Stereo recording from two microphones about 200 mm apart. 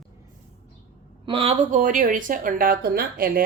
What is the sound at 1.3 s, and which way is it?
Speech, 30° right (ahead or behind).